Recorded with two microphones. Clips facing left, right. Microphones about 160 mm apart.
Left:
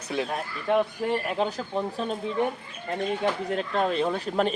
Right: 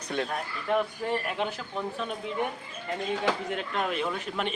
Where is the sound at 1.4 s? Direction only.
35° left (ahead or behind).